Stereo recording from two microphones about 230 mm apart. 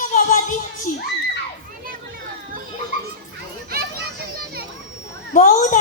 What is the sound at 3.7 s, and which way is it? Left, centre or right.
Children playing, right.